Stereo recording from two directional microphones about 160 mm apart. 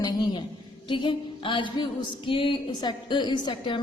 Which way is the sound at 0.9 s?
30° left (ahead or behind).